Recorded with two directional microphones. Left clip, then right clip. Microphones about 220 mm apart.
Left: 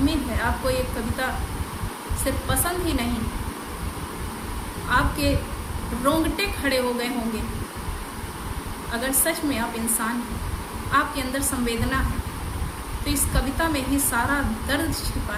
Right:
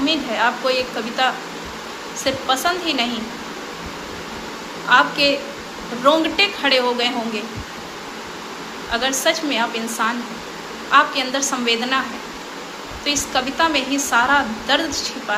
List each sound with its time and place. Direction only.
0.0 s a woman's voice: 20° left (ahead or behind)
2.2 s a woman's voice: 20° left (ahead or behind)
4.9 s a woman's voice: 20° left (ahead or behind)
8.9 s a woman's voice: 20° left (ahead or behind)
13.1 s a woman's voice: 20° left (ahead or behind)